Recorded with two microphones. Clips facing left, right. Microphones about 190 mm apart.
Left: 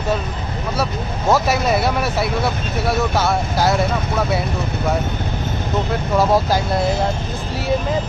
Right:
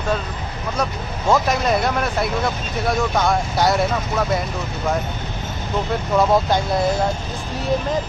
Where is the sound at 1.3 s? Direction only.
5° left (ahead or behind).